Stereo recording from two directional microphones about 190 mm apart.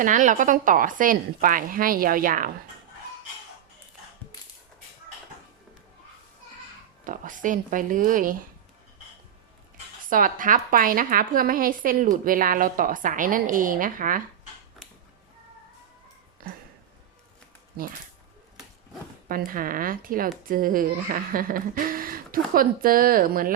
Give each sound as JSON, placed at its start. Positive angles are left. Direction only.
{"t": 0.0, "sound": "a woman's voice", "side_deg": -40}
{"t": 7.0, "sound": "a woman's voice", "side_deg": -45}
{"t": 10.1, "sound": "a woman's voice", "side_deg": -45}
{"t": 19.5, "sound": "a woman's voice", "side_deg": -45}